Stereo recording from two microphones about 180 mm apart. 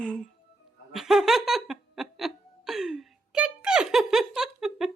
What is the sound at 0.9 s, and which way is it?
Laughter, centre (ahead or behind).